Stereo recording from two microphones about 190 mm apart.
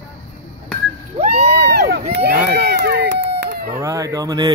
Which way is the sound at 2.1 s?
60° right (ahead or behind).